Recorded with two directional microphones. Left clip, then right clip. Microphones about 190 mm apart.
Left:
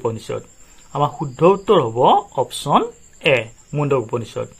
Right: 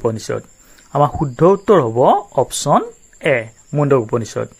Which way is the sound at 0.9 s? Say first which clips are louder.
Right 5 dB; 40° right (ahead or behind).